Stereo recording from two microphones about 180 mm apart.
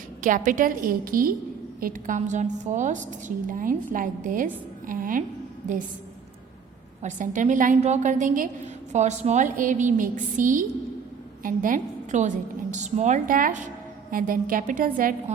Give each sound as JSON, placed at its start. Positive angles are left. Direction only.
{"t": 0.2, "sound": "a woman's voice", "side_deg": -45}
{"t": 7.0, "sound": "a woman's voice", "side_deg": -45}